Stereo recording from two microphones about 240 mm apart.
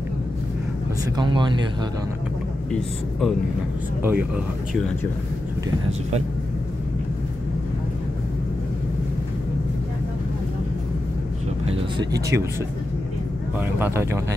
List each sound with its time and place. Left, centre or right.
1.1 s speech: centre
2.7 s speech: centre
12.0 s speech: centre
13.6 s speech: centre